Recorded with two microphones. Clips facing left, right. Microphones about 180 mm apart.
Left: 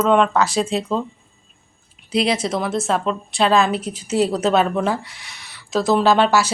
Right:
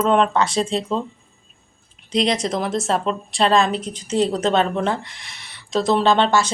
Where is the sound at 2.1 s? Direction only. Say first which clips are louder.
Left 1 dB; 5° left (ahead or behind).